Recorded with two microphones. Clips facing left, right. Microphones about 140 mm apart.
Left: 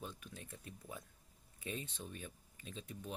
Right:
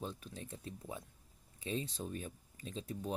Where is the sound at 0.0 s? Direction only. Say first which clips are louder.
Right 5 dB; 30° right (ahead or behind).